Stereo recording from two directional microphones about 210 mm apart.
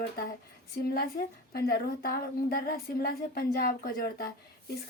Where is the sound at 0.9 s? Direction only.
45° left (ahead or behind).